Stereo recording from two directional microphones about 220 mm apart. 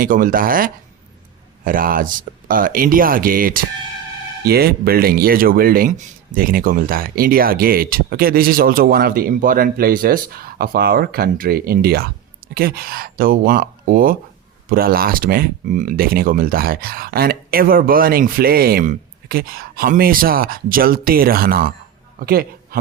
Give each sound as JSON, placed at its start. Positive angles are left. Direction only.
{"t": 0.0, "sound": "a man's voice", "side_deg": -40}